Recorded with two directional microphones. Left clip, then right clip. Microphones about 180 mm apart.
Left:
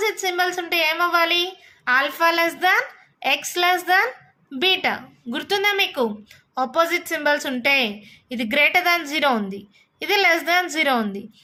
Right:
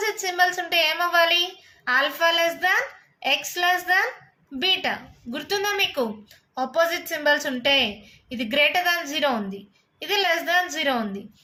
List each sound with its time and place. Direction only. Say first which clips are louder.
0.0 s a woman's voice: left 1 dB; 30° left (ahead or behind)